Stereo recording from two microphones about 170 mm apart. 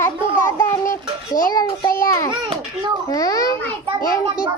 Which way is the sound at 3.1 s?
20° left (ahead or behind).